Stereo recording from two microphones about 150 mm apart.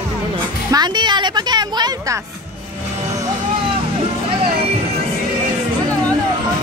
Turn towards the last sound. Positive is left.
turn(degrees=-35)  # may be behind; listen again after turning